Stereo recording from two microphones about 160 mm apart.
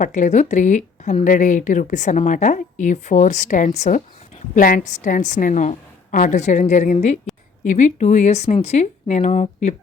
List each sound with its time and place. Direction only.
0.0 s a woman's voice: 50° left (ahead or behind)